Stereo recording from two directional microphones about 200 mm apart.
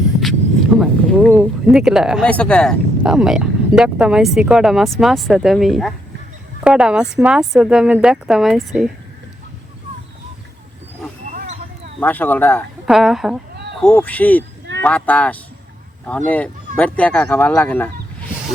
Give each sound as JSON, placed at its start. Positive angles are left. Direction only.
{"t": 0.8, "sound": "speech", "side_deg": -5}
{"t": 11.3, "sound": "a sound", "side_deg": -45}
{"t": 11.9, "sound": "speech", "side_deg": 10}
{"t": 12.8, "sound": "speech", "side_deg": 0}